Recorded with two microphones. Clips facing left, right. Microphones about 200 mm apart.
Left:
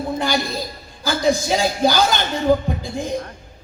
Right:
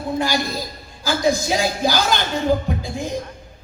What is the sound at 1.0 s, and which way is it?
Speech, 60° left (ahead or behind).